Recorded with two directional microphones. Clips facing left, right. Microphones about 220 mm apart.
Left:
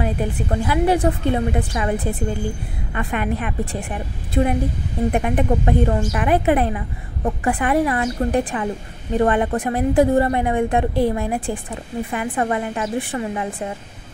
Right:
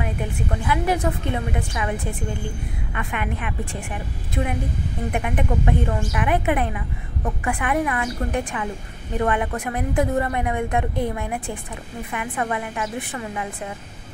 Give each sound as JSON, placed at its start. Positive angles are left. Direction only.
{"t": 0.0, "sound": "a woman's voice", "side_deg": 35}